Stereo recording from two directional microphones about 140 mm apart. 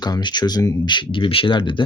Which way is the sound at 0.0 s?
30° left (ahead or behind).